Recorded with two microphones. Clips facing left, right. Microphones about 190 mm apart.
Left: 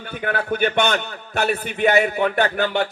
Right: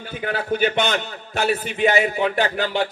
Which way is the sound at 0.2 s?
55° left (ahead or behind).